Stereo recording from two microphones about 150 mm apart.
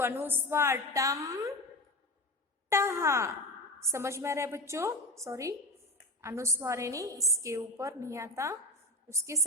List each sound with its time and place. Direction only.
0.0 s a woman's voice: 15° right (ahead or behind)
2.6 s a woman's voice: 20° right (ahead or behind)